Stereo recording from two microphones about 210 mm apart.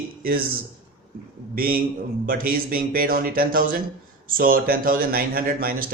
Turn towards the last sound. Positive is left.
turn(degrees=-45)  # may be behind; listen again after turning